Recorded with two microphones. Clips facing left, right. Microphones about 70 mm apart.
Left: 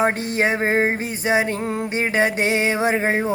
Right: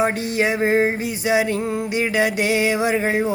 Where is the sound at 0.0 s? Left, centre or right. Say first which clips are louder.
Even; left.